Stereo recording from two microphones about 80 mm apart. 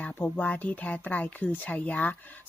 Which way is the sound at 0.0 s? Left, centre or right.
Centre.